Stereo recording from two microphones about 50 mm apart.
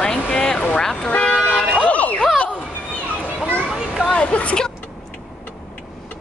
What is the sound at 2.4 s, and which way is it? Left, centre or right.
Children playing, left.